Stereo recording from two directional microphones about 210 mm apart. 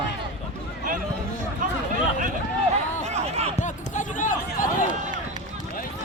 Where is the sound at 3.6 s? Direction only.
35° left (ahead or behind).